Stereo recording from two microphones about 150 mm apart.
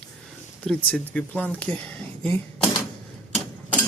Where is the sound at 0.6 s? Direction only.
10° left (ahead or behind).